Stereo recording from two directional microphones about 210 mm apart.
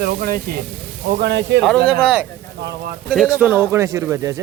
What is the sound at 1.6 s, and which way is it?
Speech, centre (ahead or behind).